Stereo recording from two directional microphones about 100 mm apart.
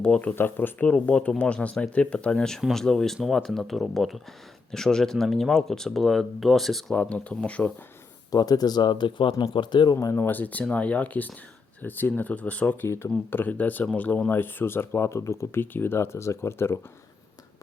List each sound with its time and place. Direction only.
0.0 s speech: 10° left (ahead or behind)
8.3 s speech: 40° left (ahead or behind)
10.1 s speech: 20° left (ahead or behind)